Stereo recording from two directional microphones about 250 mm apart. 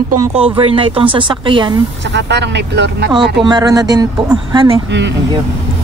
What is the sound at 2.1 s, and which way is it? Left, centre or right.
Speech, right.